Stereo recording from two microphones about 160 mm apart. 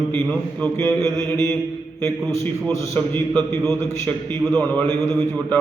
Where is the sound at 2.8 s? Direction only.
15° left (ahead or behind).